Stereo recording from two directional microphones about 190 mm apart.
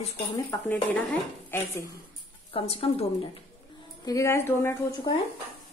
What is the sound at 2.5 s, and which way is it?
Speech, 30° left (ahead or behind).